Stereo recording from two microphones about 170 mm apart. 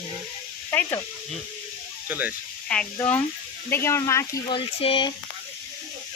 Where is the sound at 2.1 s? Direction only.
10° right (ahead or behind).